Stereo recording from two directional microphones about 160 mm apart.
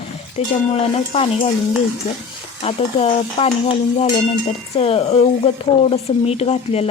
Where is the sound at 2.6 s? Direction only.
40° left (ahead or behind).